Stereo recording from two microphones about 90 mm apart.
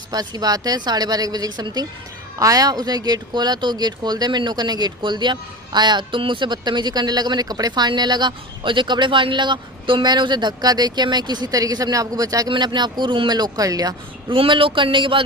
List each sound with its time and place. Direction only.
0.1 s speech: 45° right (ahead or behind)
12.5 s speech: 55° right (ahead or behind)
14.3 s speech: 75° right (ahead or behind)